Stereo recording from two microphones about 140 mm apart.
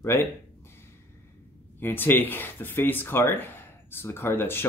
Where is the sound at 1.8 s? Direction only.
15° left (ahead or behind).